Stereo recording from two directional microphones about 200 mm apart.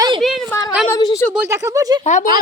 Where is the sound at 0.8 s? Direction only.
15° left (ahead or behind).